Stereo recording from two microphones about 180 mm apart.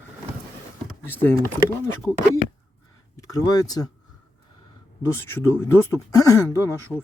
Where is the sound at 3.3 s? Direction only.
20° left (ahead or behind).